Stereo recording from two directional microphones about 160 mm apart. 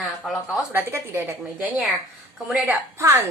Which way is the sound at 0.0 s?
Centre (ahead or behind).